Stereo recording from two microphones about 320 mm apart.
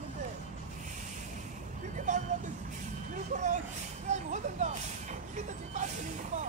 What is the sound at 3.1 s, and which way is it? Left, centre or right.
Vehicle, right.